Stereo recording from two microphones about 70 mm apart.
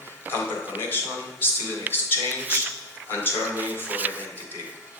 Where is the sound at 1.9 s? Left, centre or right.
Right.